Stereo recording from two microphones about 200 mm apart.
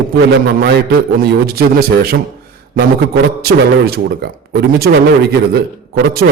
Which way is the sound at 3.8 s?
50° right (ahead or behind).